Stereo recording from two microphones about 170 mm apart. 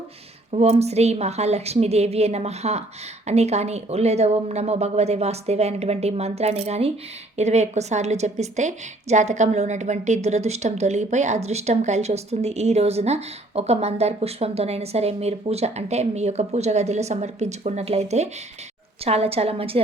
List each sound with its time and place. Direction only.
0.5 s a woman's voice: 40° right (ahead or behind)